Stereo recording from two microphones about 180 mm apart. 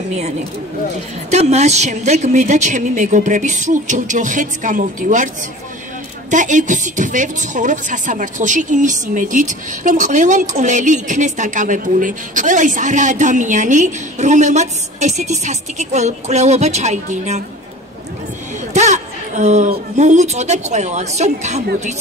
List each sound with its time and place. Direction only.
0.1 s a woman's voice: 40° right (ahead or behind)
6.3 s a woman's voice: 45° right (ahead or behind)
18.7 s a woman's voice: 40° right (ahead or behind)